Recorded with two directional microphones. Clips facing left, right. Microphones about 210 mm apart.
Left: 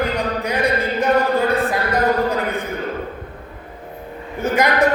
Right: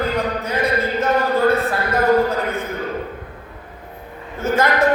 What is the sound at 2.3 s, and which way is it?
Speech, 15° left (ahead or behind).